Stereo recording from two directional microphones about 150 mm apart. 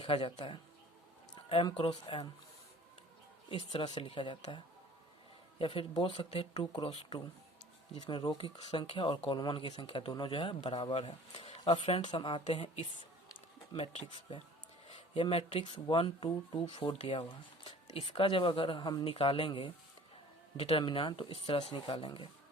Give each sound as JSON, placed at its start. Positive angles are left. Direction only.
{"t": 0.0, "sound": "speech", "side_deg": 35}
{"t": 1.4, "sound": "a sound", "side_deg": 40}
{"t": 1.7, "sound": "speech", "side_deg": 40}
{"t": 3.7, "sound": "speech", "side_deg": 30}
{"t": 5.5, "sound": "speech", "side_deg": 35}
{"t": 6.6, "sound": "speech", "side_deg": 30}
{"t": 8.2, "sound": "speech", "side_deg": 30}
{"t": 13.7, "sound": "speech", "side_deg": 40}